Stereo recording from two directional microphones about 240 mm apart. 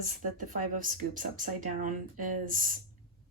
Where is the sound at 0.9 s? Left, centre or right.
Right.